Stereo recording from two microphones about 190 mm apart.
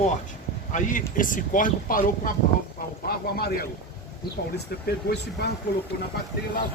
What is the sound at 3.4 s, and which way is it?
Speech, 55° left (ahead or behind).